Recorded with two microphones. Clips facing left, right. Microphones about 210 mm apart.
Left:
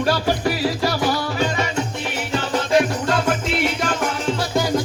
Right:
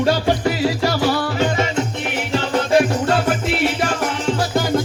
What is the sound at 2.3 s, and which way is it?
Music, 30° right (ahead or behind).